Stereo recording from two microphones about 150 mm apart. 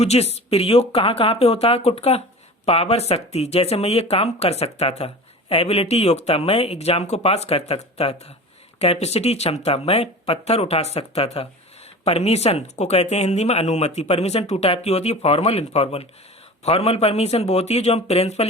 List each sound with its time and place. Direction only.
0.0 s speech: 45° left (ahead or behind)